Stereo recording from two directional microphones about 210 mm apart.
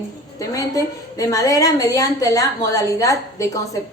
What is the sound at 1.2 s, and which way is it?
A woman's voice, 15° left (ahead or behind).